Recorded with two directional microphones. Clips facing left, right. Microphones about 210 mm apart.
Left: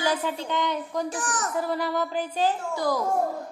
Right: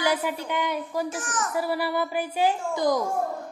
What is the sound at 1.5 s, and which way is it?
A woman's voice, 10° right (ahead or behind).